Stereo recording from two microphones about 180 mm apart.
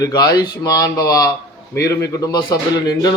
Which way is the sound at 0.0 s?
20° left (ahead or behind).